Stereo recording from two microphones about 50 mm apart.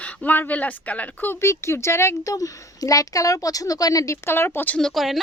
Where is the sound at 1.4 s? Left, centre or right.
Left.